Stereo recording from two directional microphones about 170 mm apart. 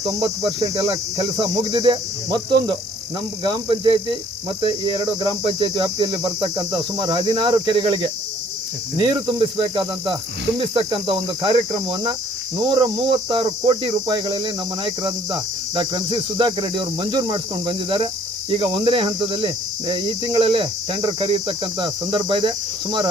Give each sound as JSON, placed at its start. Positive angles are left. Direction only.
{"t": 0.1, "sound": "speech", "side_deg": -20}
{"t": 10.6, "sound": "cricket", "side_deg": -30}
{"t": 12.5, "sound": "speech", "side_deg": -25}
{"t": 18.5, "sound": "cricket", "side_deg": -30}
{"t": 19.9, "sound": "speech", "side_deg": -25}